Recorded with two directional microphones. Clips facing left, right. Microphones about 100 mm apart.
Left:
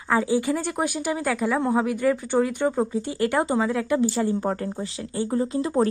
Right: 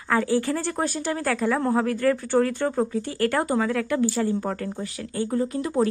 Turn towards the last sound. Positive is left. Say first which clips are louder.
# left 1 dB
turn(degrees=25)  # may be behind; listen again after turning